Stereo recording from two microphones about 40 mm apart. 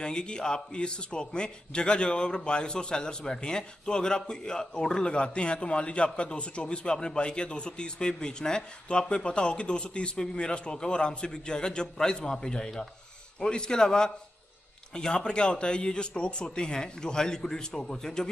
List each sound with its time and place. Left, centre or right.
0.0 s a man's voice: left